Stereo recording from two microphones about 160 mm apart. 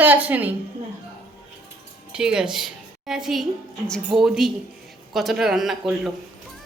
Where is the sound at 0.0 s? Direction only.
10° right (ahead or behind).